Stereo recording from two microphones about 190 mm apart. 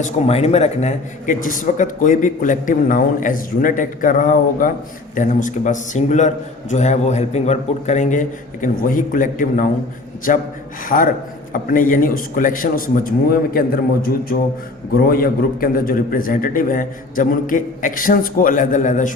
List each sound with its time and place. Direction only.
0.0 s a man's voice: 35° left (ahead or behind)